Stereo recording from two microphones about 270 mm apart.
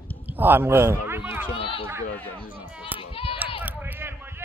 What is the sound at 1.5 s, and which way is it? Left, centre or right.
Speech, centre.